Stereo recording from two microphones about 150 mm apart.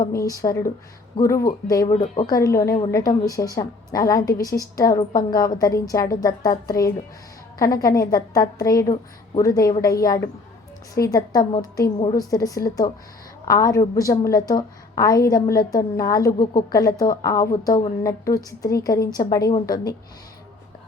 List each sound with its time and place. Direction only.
0.0 s a woman's voice: 20° left (ahead or behind)